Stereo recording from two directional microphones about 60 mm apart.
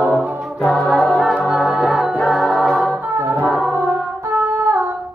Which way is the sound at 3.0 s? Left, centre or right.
Right.